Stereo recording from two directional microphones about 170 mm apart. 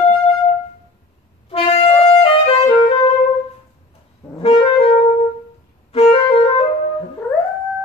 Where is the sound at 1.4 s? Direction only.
35° left (ahead or behind).